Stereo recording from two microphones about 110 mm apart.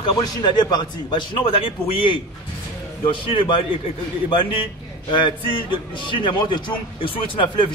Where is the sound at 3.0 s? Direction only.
50° left (ahead or behind).